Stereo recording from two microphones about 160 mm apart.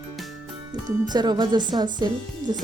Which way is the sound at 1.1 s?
25° right (ahead or behind).